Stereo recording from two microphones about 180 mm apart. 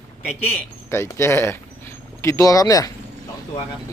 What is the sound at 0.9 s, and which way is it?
Speech, 15° left (ahead or behind).